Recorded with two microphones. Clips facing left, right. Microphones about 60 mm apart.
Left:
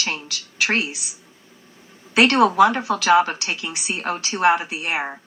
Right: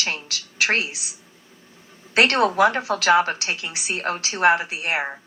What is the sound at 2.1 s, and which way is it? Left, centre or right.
A woman's voice, right.